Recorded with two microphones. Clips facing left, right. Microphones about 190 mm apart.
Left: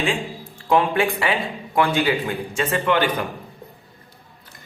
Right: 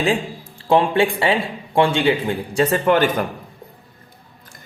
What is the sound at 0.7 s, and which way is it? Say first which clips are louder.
Speech: right 3 dB; 30° right (ahead or behind).